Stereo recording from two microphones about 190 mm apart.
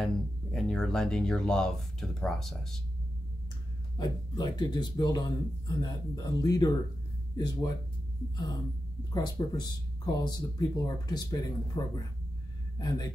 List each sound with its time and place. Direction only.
0.0 s speech: 5° left (ahead or behind)
4.0 s speech: 20° left (ahead or behind)
9.1 s speech: 20° left (ahead or behind)